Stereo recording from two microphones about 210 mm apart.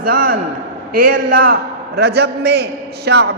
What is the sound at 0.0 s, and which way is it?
A man's voice, 45° right (ahead or behind).